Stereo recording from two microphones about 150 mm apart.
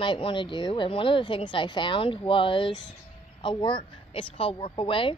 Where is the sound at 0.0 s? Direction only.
35° left (ahead or behind).